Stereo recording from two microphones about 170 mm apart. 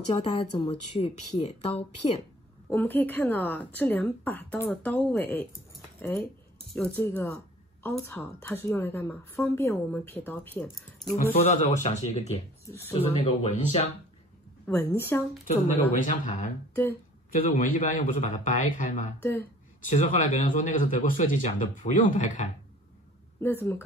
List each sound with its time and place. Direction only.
0.1 s speech: 30° left (ahead or behind)
2.7 s a woman's voice: 10° left (ahead or behind)
11.3 s speech: 40° left (ahead or behind)
12.6 s speech: 15° left (ahead or behind)
12.9 s speech: 35° left (ahead or behind)
14.7 s a woman's voice: 10° left (ahead or behind)
16.0 s speech: 50° left (ahead or behind)
17.6 s speech: 45° left (ahead or behind)
19.1 s a woman's voice: 10° left (ahead or behind)
19.9 s speech: 45° left (ahead or behind)
23.4 s a woman's voice: 10° left (ahead or behind)